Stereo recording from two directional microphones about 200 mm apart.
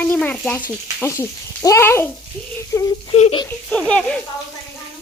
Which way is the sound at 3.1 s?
30° left (ahead or behind).